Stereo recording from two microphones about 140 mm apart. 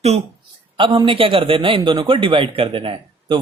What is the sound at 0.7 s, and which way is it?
Speech, 35° right (ahead or behind).